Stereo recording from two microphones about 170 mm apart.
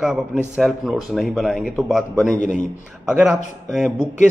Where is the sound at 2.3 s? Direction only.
50° left (ahead or behind).